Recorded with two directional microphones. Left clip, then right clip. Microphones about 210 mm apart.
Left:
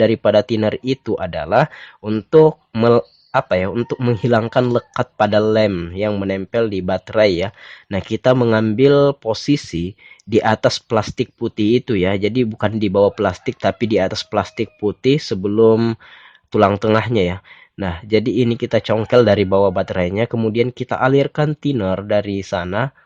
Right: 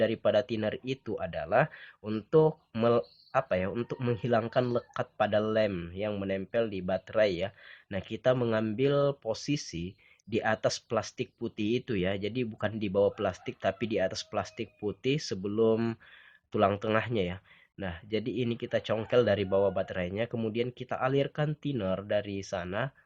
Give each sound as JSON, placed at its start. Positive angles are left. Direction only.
{"t": 0.0, "sound": "speech", "side_deg": 35}